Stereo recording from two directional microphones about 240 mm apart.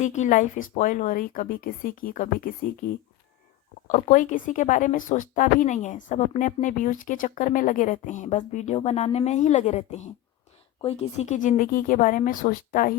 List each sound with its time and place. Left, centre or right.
0.0 s speech: left
3.8 s speech: left